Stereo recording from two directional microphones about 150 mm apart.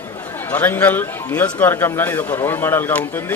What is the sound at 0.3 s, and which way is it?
A man's voice, 10° left (ahead or behind).